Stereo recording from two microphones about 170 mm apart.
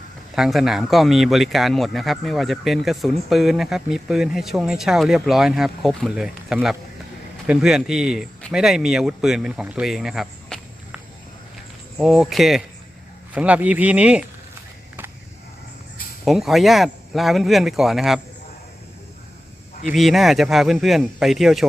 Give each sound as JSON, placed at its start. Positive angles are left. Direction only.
{"t": 0.3, "sound": "speech", "side_deg": -5}
{"t": 16.2, "sound": "speech", "side_deg": 0}
{"t": 19.9, "sound": "speech", "side_deg": 0}